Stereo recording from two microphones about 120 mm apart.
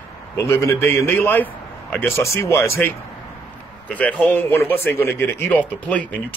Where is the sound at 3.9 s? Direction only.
10° left (ahead or behind).